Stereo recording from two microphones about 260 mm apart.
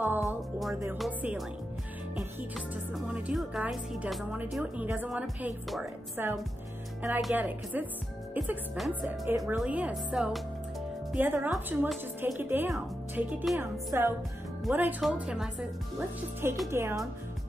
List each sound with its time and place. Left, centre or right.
0.0 s a woman's voice: centre